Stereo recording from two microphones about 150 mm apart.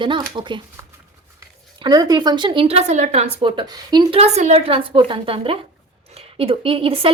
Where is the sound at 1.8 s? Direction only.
25° right (ahead or behind); by 3.5 s 50° right (ahead or behind).